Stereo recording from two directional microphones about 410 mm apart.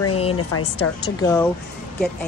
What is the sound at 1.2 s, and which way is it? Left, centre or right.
Speech, centre.